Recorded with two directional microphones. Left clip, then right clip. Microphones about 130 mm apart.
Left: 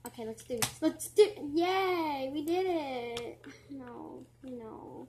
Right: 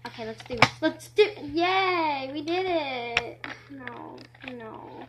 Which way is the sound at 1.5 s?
25° left (ahead or behind).